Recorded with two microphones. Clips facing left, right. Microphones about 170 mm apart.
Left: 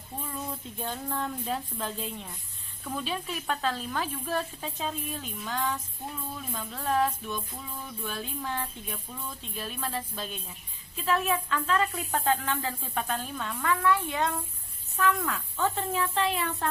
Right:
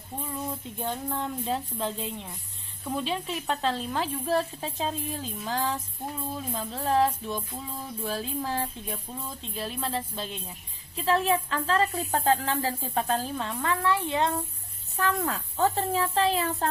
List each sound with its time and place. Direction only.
0.8 s speech: 15° right (ahead or behind); by 16.6 s 35° right (ahead or behind)